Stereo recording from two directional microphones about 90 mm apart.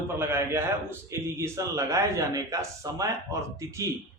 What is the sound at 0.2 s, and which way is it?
A man's voice, 25° right (ahead or behind).